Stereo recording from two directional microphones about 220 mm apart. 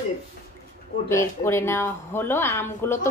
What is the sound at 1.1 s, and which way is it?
Speech, 10° left (ahead or behind).